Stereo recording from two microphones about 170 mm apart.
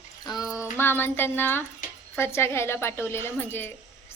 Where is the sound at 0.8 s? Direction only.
15° left (ahead or behind).